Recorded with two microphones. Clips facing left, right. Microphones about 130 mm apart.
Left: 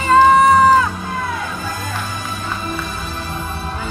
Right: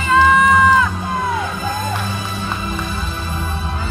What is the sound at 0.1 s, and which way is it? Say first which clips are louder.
Music: left 3 dB; 35° left (ahead or behind).